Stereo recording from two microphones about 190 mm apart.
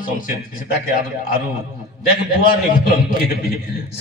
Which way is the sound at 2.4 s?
50° left (ahead or behind).